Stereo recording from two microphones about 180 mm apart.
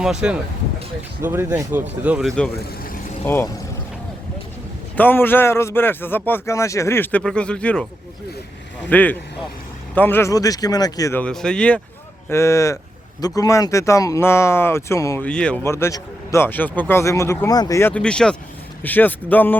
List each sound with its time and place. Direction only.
0.0 s speech: 5° right (ahead or behind)
3.2 s speech: 10° left (ahead or behind)
4.9 s speech: 10° left (ahead or behind)
8.9 s speech: 10° left (ahead or behind)
11.2 s speech: 5° left (ahead or behind)
12.3 s speech: 15° left (ahead or behind)
15.3 s speech: 5° left (ahead or behind)